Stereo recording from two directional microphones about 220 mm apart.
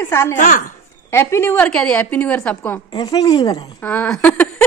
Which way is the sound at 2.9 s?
20° left (ahead or behind).